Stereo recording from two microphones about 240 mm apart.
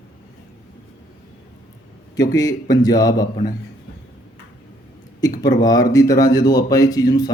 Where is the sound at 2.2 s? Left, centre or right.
Centre.